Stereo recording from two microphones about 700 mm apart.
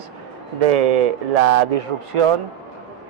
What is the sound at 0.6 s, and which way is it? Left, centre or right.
A man's voice, right.